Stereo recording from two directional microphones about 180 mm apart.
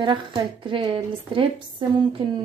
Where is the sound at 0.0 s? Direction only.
25° right (ahead or behind).